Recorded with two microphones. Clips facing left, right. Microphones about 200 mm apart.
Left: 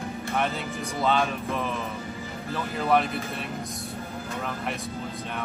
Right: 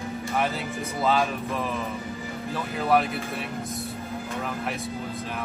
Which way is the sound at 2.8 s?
Centre (ahead or behind).